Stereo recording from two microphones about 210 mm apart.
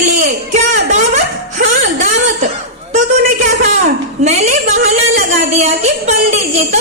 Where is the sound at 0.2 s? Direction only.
35° right (ahead or behind).